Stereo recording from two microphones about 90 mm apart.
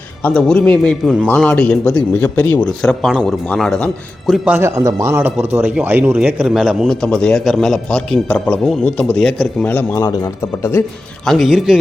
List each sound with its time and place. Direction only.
0.2 s speech: 20° left (ahead or behind)
2.6 s a man's voice: 5° left (ahead or behind)
4.3 s a man's voice: centre (ahead or behind)
4.6 s speech: 35° right (ahead or behind)
5.2 s a man's voice: 20° right (ahead or behind); by 9.1 s 15° left (ahead or behind)
9.1 s a man's voice: 5° left (ahead or behind)
9.6 s a man's voice: 20° left (ahead or behind)
11.3 s a man's voice: centre (ahead or behind)